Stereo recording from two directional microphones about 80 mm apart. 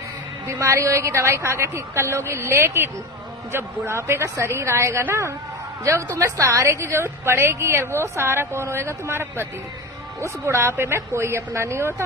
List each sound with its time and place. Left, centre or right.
0.5 s a woman's voice: right